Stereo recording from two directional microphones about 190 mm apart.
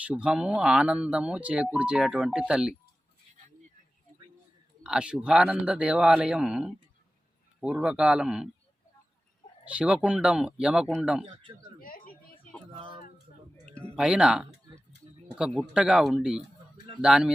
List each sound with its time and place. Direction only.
0.0 s speech: 5° right (ahead or behind)
4.8 s speech: 5° right (ahead or behind)
9.7 s speech: 5° right (ahead or behind)
11.8 s a sound: 50° left (ahead or behind)
12.8 s a sound: 25° right (ahead or behind)
13.9 s speech: 5° right (ahead or behind)
15.7 s speech: 5° right (ahead or behind)
16.7 s a sound: 25° right (ahead or behind)
17.0 s speech: 5° right (ahead or behind)